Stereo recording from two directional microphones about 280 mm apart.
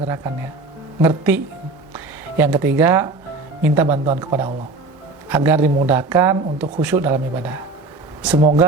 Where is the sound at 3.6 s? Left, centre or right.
Centre.